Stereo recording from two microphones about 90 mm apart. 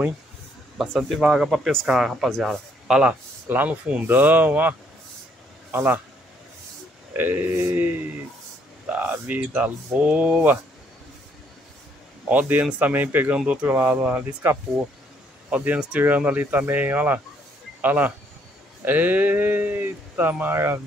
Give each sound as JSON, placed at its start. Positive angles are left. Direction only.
{"t": 0.7, "sound": "speech", "side_deg": 0}
{"t": 3.0, "sound": "speech", "side_deg": -15}
{"t": 7.2, "sound": "speech", "side_deg": -25}
{"t": 12.3, "sound": "speech", "side_deg": -20}